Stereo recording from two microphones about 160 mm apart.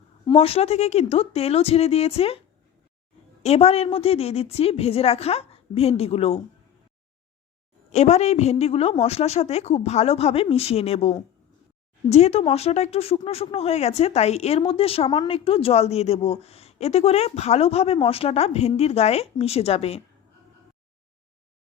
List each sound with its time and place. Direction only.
0.3 s speech: 40° left (ahead or behind)
3.4 s speech: 40° left (ahead or behind)
7.9 s speech: 45° left (ahead or behind)